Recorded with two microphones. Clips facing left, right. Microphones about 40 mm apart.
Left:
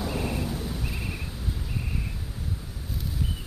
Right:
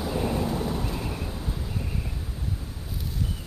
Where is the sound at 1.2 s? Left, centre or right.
Centre.